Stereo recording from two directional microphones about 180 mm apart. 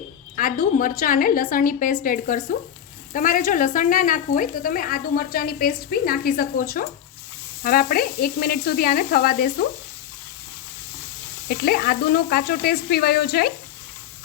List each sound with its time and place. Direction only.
0.3 s speech: 50° left (ahead or behind)
7.6 s sizzle: 55° left (ahead or behind)
11.4 s sizzle: 60° left (ahead or behind)